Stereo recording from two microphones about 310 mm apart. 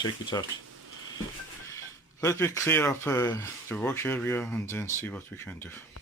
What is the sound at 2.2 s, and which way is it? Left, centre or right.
Speech, centre.